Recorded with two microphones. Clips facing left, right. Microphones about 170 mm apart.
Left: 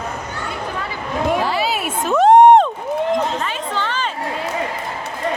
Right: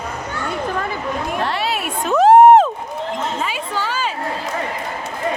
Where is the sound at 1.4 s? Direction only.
Centre (ahead or behind).